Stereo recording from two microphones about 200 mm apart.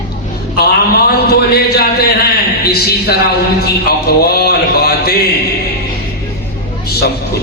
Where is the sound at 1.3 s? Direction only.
50° left (ahead or behind).